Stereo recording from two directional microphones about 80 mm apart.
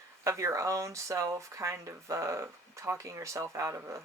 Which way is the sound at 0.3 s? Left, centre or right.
Right.